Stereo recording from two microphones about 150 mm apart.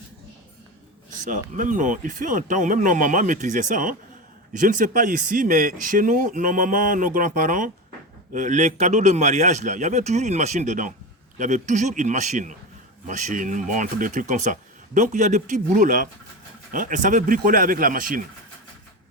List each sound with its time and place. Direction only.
1.2 s a man's voice: 60° right (ahead or behind)